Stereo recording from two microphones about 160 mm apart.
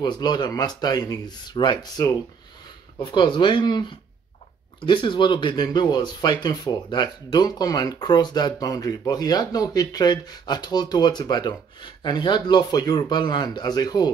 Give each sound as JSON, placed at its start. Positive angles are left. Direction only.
{"t": 0.0, "sound": "speech", "side_deg": 25}